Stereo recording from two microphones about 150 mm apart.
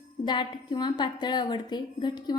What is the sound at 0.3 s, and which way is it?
A woman's voice, 30° left (ahead or behind).